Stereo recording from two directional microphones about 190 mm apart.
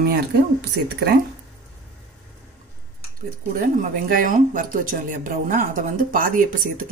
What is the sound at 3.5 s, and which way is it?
Speech, 45° right (ahead or behind).